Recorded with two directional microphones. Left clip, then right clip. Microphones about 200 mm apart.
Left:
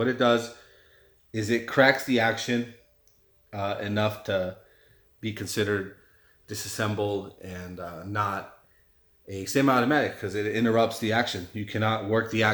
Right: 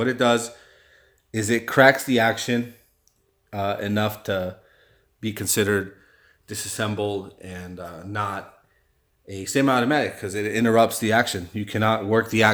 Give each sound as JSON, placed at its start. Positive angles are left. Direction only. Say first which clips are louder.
{"t": 0.0, "sound": "a man's voice", "louder": "right 3 dB", "side_deg": -35}
{"t": 1.3, "sound": "speech", "louder": "right 4 dB", "side_deg": -50}
{"t": 6.5, "sound": "speech", "louder": "right 3 dB", "side_deg": -30}